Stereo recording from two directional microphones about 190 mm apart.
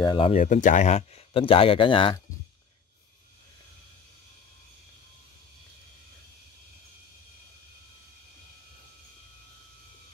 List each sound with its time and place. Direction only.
0.0 s speech: 25° left (ahead or behind)
0.4 s speech: 40° left (ahead or behind); by 2.1 s 25° left (ahead or behind)